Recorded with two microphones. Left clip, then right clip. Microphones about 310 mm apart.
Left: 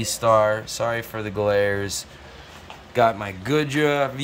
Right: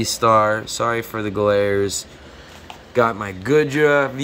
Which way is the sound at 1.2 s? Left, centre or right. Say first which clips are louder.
Right 3 dB; left.